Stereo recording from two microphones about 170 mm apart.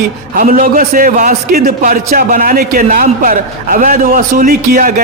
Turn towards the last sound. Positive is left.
turn(degrees=-50)  # may be behind; listen again after turning